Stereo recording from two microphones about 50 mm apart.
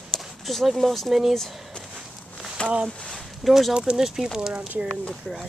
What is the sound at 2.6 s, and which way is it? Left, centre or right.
Speech, left.